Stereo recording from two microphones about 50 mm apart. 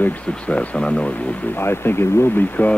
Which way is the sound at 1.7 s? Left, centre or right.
Left.